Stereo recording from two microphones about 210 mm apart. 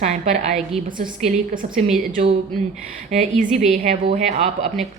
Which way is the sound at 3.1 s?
35° right (ahead or behind).